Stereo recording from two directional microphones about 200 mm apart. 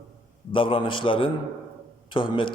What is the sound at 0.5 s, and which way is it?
A man's voice, 25° left (ahead or behind).